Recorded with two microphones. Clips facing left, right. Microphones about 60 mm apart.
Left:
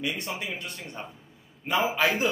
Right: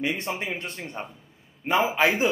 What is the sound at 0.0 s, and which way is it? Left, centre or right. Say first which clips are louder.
A man's voice: right 4 dB; right.